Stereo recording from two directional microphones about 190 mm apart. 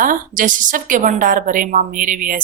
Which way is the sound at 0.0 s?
45° right (ahead or behind).